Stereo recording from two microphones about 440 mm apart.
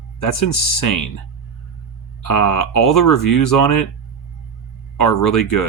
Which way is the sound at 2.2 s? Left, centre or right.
Left.